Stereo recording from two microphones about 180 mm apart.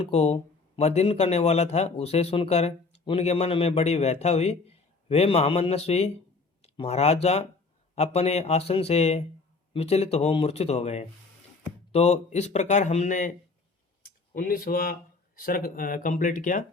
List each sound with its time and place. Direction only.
0.0 s speech: 35° left (ahead or behind)
14.0 s a sound: 55° left (ahead or behind)
15.4 s speech: 55° left (ahead or behind)